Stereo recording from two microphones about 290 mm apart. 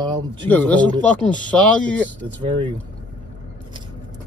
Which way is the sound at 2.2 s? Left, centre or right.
Centre.